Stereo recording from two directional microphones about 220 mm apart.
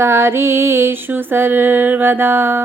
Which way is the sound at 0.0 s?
10° right (ahead or behind).